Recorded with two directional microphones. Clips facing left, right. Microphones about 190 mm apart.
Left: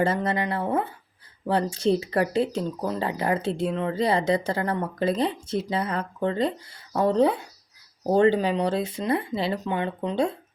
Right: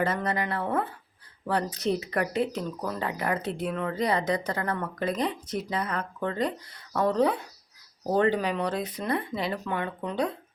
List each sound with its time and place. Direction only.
0.0 s speech: 30° left (ahead or behind)